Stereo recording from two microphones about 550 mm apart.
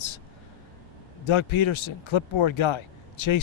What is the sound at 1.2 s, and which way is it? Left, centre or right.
Speech, left.